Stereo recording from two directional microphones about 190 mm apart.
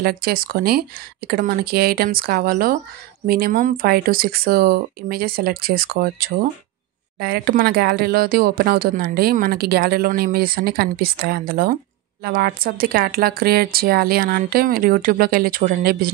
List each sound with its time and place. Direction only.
0.0 s speech: 50° right (ahead or behind)